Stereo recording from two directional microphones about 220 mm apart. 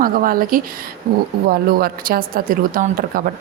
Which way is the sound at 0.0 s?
40° right (ahead or behind).